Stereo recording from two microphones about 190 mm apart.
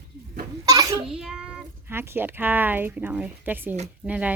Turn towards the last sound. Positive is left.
turn(degrees=-5)  # may be behind; listen again after turning